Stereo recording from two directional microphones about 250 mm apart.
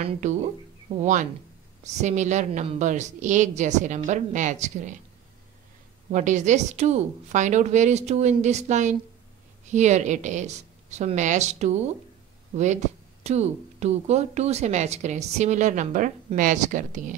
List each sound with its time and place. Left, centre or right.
0.0 s speech: right
1.8 s speech: right
6.1 s speech: right
13.2 s speech: right